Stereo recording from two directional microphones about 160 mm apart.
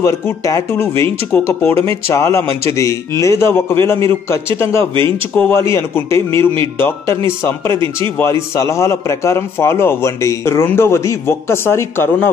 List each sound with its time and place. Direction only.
0.0 s a man's voice: 20° left (ahead or behind)
7.7 s speech: 30° right (ahead or behind)
8.2 s a man's voice: 15° left (ahead or behind)